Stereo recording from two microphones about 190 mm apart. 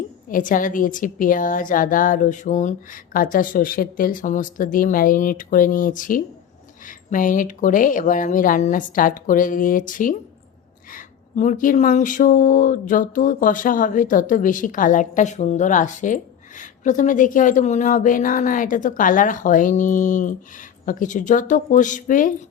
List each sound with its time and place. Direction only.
0.3 s speech: 45° left (ahead or behind)